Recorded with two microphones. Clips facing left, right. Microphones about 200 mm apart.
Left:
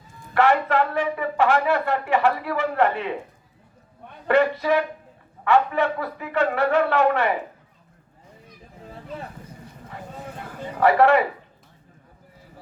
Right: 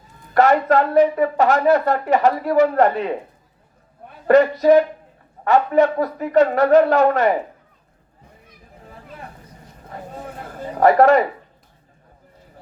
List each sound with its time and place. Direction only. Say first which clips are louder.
0.3 s speech: right 4 dB; 40° right (ahead or behind)
4.3 s speech: right 7 dB; 40° right (ahead or behind)
10.8 s speech: right 4 dB; 40° right (ahead or behind)